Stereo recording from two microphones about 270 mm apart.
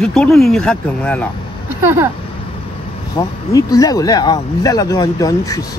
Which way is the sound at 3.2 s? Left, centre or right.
Centre.